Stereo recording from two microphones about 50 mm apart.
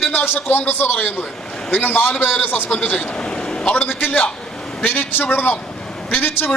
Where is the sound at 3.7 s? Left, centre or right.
Left.